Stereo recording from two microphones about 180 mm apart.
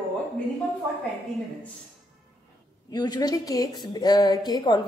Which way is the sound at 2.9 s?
20° left (ahead or behind).